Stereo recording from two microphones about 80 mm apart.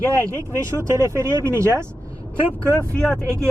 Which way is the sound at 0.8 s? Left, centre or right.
Right.